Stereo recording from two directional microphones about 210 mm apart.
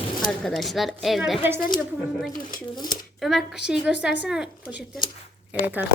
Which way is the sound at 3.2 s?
Centre (ahead or behind).